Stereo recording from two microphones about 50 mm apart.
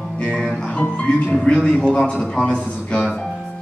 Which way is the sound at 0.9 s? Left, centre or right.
Left.